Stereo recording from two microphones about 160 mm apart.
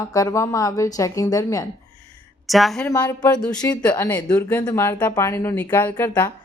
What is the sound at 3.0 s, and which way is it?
A woman's voice, 25° left (ahead or behind).